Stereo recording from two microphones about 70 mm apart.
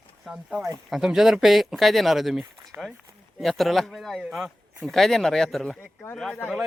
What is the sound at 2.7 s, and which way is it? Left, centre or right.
Speech, right.